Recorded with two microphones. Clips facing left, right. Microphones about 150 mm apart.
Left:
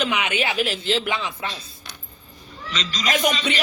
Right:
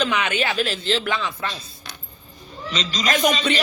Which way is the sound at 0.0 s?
15° left (ahead or behind).